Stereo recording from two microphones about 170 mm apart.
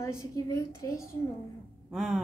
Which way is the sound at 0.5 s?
20° left (ahead or behind).